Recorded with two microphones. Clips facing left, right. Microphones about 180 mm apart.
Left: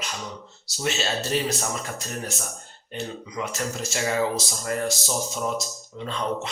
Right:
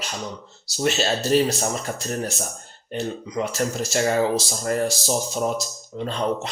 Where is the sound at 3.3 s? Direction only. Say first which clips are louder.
Right 5 dB; 35° right (ahead or behind).